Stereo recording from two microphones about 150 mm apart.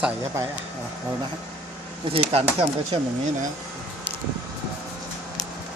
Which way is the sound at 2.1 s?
40° right (ahead or behind).